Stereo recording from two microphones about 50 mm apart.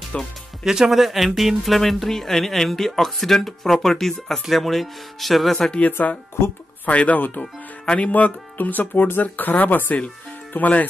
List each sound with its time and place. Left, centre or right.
0.1 s speech: left
0.7 s speech: centre
5.7 s speech: left
7.8 s speech: centre
8.1 s speech: left